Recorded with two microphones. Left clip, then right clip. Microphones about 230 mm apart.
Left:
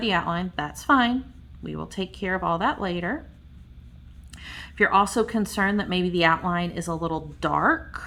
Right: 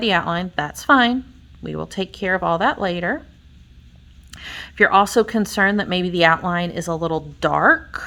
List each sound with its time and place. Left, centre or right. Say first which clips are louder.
0.0 s speech: right 5 dB; right
4.3 s speech: right 6 dB; right